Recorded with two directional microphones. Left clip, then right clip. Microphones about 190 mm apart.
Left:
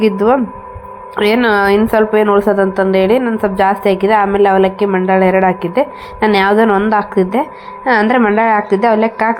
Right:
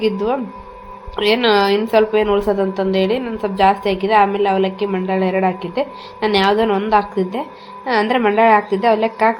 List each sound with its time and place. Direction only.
0.0 s a woman's voice: 30° left (ahead or behind)
8.0 s a woman's voice: 20° left (ahead or behind)